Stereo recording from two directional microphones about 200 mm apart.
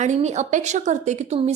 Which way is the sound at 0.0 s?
35° right (ahead or behind).